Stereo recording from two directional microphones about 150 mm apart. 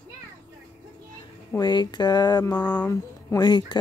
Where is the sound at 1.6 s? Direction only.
30° left (ahead or behind).